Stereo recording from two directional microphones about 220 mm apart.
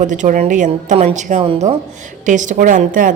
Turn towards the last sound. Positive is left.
turn(degrees=-35)  # may be behind; listen again after turning